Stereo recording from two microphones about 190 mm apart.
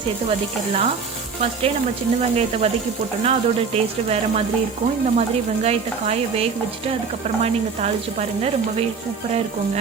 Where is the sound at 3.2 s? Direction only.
35° right (ahead or behind).